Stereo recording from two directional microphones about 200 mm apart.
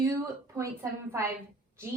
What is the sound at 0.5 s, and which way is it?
Speech, 15° right (ahead or behind).